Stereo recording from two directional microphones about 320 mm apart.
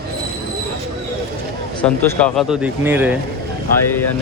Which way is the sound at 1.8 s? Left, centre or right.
Centre.